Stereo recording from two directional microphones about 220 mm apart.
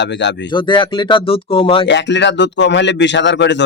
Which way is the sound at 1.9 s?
55° left (ahead or behind).